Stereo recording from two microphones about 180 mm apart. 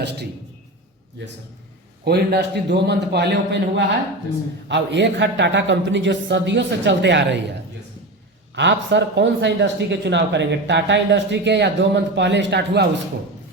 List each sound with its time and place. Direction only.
0.0 s a man's voice: 70° right (ahead or behind)
2.0 s a man's voice: 65° right (ahead or behind)
8.5 s speech: 80° right